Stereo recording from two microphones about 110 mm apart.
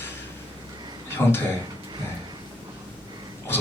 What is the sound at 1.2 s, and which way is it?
Speech, 20° left (ahead or behind).